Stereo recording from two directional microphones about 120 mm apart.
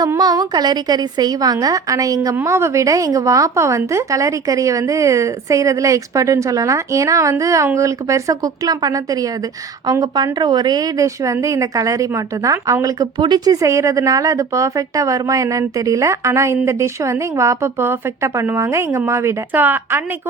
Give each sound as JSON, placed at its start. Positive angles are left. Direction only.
{"t": 0.2, "sound": "a woman's voice", "side_deg": -35}